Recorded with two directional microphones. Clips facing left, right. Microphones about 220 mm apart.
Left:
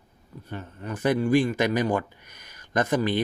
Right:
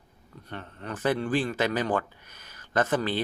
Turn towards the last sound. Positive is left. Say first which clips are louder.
# left 2 dB
turn(degrees=15)  # may be behind; listen again after turning